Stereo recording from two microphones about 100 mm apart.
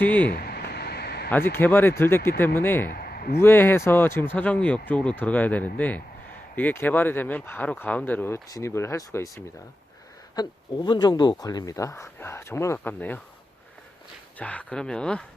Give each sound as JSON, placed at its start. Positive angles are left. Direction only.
{"t": 0.0, "sound": "speech", "side_deg": 15}
{"t": 1.3, "sound": "speech", "side_deg": 20}
{"t": 8.4, "sound": "speech", "side_deg": 30}
{"t": 10.3, "sound": "speech", "side_deg": 45}
{"t": 14.3, "sound": "speech", "side_deg": 15}